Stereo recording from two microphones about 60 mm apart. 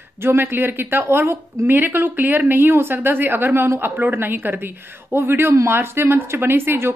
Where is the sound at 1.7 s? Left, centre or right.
Right.